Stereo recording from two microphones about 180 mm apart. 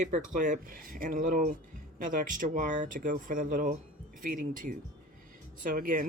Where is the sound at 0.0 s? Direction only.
45° right (ahead or behind).